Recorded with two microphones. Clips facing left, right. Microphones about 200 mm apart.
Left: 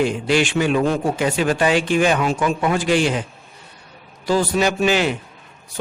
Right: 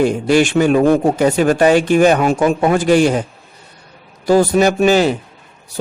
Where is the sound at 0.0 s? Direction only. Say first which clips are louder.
Right 5 dB; 45° right (ahead or behind).